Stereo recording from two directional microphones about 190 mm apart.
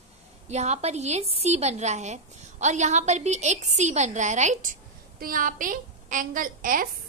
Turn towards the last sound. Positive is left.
turn(degrees=-45)  # may be behind; listen again after turning